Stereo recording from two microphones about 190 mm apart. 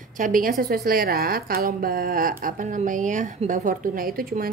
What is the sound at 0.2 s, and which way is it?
A woman's voice, 45° right (ahead or behind).